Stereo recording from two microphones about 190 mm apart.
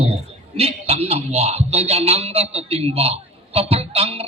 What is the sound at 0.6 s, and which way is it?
A man's voice, 30° right (ahead or behind).